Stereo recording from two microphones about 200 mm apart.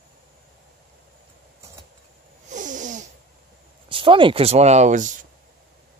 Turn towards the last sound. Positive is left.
turn(degrees=-40)  # may be behind; listen again after turning